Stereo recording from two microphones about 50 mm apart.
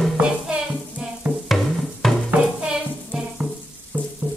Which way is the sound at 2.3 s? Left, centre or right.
Centre.